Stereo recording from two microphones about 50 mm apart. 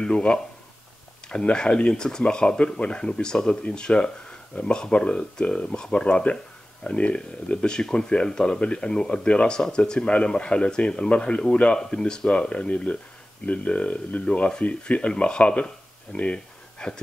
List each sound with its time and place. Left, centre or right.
0.0 s speech: left